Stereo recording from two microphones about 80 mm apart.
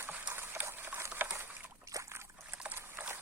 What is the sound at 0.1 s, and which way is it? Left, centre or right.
Horse, centre.